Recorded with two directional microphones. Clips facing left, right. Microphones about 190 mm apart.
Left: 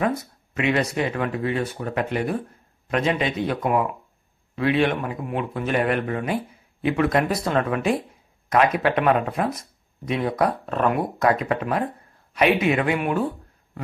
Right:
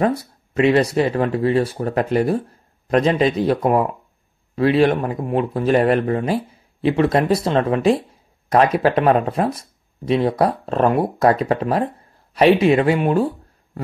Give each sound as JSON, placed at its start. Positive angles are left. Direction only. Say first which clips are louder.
{"t": 0.0, "sound": "a man's voice", "louder": "right 5 dB", "side_deg": -35}